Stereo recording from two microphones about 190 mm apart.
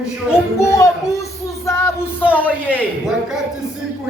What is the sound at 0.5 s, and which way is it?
Music, 15° left (ahead or behind).